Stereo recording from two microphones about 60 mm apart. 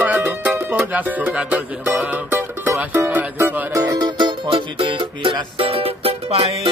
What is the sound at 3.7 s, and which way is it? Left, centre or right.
Music, right.